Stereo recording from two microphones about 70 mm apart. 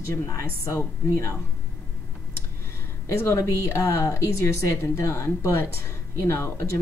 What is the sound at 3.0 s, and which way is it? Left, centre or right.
Speech, left.